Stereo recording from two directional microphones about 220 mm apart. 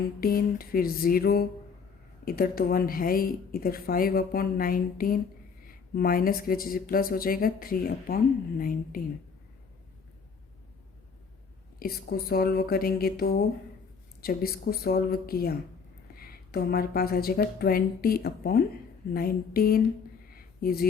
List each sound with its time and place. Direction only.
0.2 s speech: 40° left (ahead or behind)
11.8 s speech: 45° left (ahead or behind)
20.3 s a sound: 40° left (ahead or behind)